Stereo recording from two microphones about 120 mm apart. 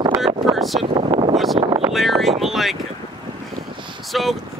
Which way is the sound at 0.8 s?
50° right (ahead or behind).